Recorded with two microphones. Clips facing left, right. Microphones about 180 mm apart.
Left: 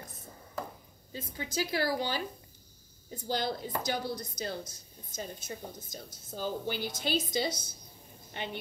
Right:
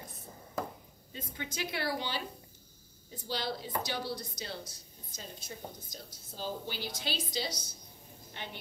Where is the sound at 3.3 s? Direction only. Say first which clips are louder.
Left 3 dB; 50° left (ahead or behind).